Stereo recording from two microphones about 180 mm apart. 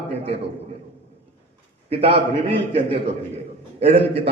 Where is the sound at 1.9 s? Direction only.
30° right (ahead or behind).